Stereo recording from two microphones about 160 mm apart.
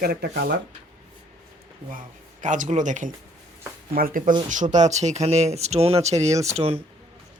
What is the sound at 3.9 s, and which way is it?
Speech, 60° right (ahead or behind).